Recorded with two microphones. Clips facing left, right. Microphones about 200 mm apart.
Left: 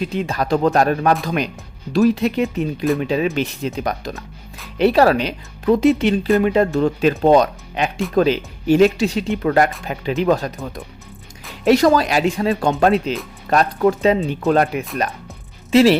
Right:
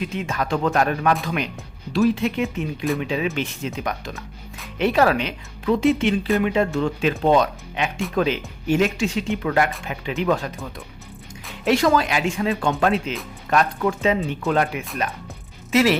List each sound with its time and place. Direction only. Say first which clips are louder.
0.0 s speech: left 4 dB; 35° left (ahead or behind)